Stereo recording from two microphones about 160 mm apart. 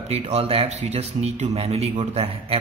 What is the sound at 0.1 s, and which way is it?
A man's voice, 40° right (ahead or behind).